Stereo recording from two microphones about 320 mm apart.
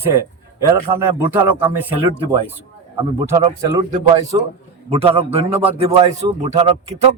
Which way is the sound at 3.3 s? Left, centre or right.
Centre.